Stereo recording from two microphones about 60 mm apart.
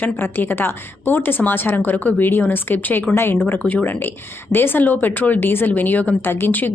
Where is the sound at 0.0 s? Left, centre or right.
Left.